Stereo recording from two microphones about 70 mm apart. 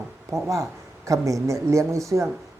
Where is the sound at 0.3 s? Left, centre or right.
Right.